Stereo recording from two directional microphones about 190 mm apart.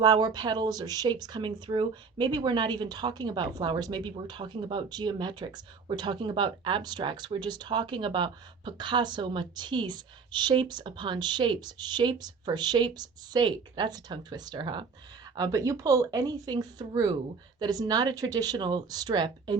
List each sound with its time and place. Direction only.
0.0 s speech: 20° right (ahead or behind)